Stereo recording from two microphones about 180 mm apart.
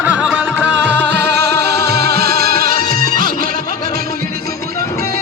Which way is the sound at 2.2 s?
60° right (ahead or behind).